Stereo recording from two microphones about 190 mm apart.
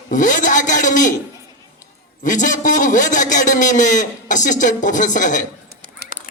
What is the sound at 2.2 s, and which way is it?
A man's voice, 40° left (ahead or behind).